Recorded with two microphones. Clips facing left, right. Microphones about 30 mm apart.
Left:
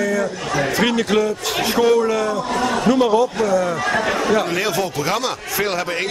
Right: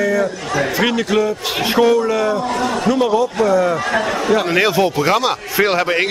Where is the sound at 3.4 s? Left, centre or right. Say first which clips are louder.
Right 3 dB; centre.